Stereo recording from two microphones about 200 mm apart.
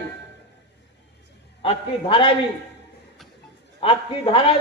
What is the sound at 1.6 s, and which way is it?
Speech, 25° left (ahead or behind).